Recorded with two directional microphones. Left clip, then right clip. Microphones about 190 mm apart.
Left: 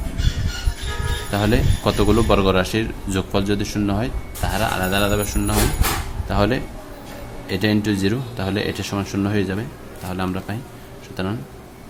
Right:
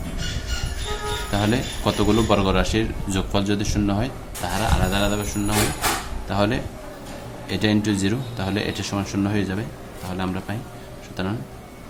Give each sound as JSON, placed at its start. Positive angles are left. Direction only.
{"t": 1.3, "sound": "speech", "side_deg": 15}
{"t": 4.5, "sound": "speech", "side_deg": 25}